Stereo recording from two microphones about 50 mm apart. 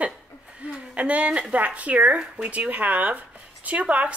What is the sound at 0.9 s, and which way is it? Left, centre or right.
A woman's voice, right.